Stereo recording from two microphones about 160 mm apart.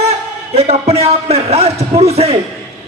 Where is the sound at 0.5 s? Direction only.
40° right (ahead or behind).